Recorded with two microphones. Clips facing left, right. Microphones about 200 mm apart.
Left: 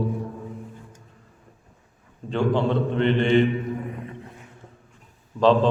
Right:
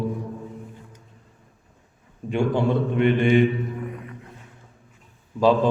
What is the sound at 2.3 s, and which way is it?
Mantra, 10° right (ahead or behind).